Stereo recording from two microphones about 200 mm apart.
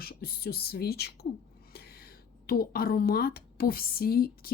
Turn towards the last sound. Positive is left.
turn(degrees=50)  # may be behind; listen again after turning